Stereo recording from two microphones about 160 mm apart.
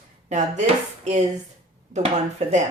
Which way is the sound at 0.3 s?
50° right (ahead or behind).